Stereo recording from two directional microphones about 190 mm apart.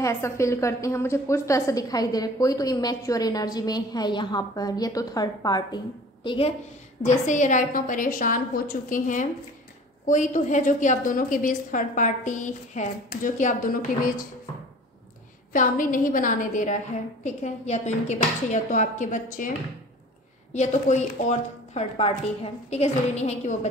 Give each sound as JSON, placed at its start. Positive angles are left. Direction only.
{"t": 0.0, "sound": "a woman's voice", "side_deg": 15}
{"t": 7.0, "sound": "a woman's voice", "side_deg": 40}
{"t": 15.5, "sound": "a woman's voice", "side_deg": 45}
{"t": 20.5, "sound": "a woman's voice", "side_deg": 35}